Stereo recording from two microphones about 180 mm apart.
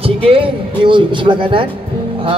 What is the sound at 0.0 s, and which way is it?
A man's voice, 30° right (ahead or behind).